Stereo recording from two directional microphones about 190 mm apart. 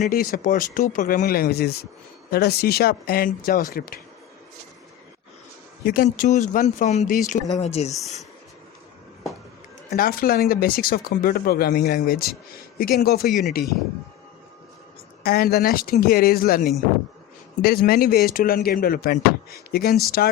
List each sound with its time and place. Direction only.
0.1 s speech: 45° left (ahead or behind)
5.8 s speech: 50° left (ahead or behind)
6.1 s speech: 40° left (ahead or behind)
9.9 s speech: 50° left (ahead or behind)
13.2 s speech: centre (ahead or behind)
15.2 s speech: 55° left (ahead or behind)